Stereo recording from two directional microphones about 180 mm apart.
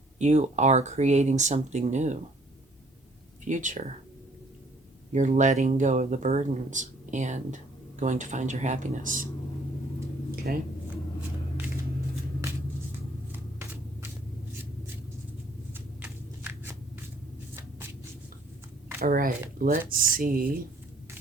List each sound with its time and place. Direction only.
0.2 s speech: 40° right (ahead or behind)
3.4 s speech: 45° right (ahead or behind)
5.1 s speech: 45° right (ahead or behind)
10.5 s speech: 55° right (ahead or behind)
13.3 s a sound: 15° right (ahead or behind)
15.7 s shuffling cards: 10° right (ahead or behind)
18.9 s speech: 55° right (ahead or behind)